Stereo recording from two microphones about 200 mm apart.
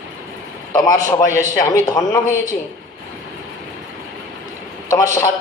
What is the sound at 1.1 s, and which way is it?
Speech, 15° left (ahead or behind).